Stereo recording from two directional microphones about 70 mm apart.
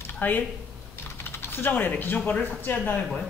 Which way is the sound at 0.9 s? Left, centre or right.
Left.